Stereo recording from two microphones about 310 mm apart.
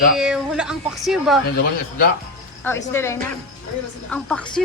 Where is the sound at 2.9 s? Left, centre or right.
Centre.